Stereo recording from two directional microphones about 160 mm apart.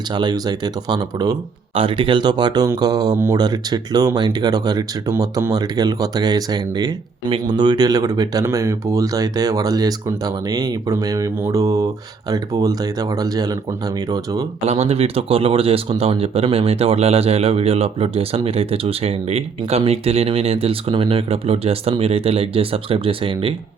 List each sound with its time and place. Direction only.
0.1 s speech: 25° right (ahead or behind)
14.7 s speech: 40° right (ahead or behind)